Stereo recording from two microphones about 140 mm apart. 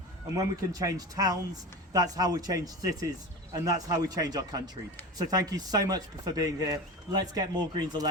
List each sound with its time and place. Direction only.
0.3 s a man's voice: 25° right (ahead or behind)